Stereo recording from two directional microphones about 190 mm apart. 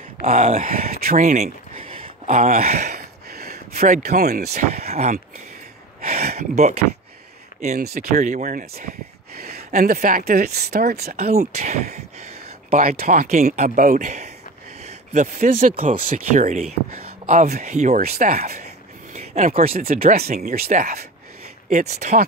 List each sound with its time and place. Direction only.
0.2 s speech: 35° right (ahead or behind)
3.3 s a sound: 55° right (ahead or behind)
3.8 s speech: 45° right (ahead or behind)
4.6 s speech: 35° right (ahead or behind)
7.8 s speech: 45° right (ahead or behind)
11.3 s speech: 40° right (ahead or behind)